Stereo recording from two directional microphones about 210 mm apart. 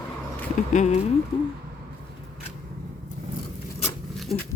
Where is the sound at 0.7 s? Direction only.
35° left (ahead or behind).